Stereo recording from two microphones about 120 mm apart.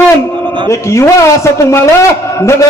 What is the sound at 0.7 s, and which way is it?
Speech, 25° left (ahead or behind).